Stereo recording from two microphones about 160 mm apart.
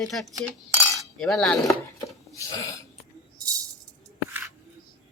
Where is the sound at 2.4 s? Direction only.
20° left (ahead or behind).